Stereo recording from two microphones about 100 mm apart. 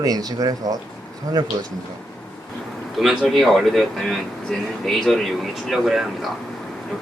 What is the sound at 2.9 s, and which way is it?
Speech, centre (ahead or behind).